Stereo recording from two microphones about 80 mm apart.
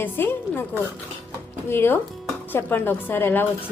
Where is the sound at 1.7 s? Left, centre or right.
Left.